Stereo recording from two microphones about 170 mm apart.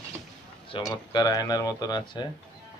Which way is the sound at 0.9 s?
20° left (ahead or behind).